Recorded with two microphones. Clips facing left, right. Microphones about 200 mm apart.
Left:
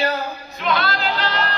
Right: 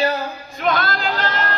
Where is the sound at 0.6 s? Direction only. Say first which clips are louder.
Right 1 dB; 45° right (ahead or behind).